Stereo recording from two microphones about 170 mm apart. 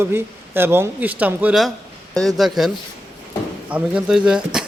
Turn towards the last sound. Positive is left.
turn(degrees=-5)  # may be behind; listen again after turning